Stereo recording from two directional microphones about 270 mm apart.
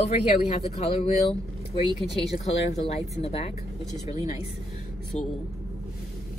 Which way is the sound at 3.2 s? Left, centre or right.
Left.